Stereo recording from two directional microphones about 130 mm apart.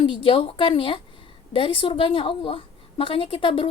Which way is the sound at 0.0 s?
40° left (ahead or behind).